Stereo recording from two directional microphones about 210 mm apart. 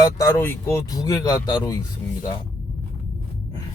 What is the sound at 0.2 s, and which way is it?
Speech, 15° left (ahead or behind).